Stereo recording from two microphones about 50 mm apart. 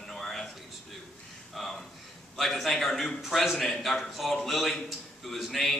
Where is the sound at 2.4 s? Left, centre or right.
Centre.